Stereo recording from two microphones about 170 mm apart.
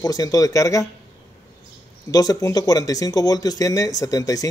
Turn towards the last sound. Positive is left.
turn(degrees=20)  # may be behind; listen again after turning